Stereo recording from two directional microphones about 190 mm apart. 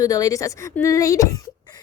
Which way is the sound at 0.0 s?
20° left (ahead or behind).